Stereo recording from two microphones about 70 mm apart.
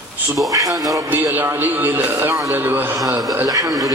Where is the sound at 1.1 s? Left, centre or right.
Right.